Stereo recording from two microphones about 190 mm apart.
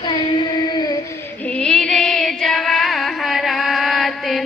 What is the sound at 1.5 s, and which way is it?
Music, 5° left (ahead or behind).